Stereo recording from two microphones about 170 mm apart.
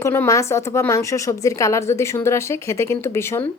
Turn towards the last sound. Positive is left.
turn(degrees=15)  # may be behind; listen again after turning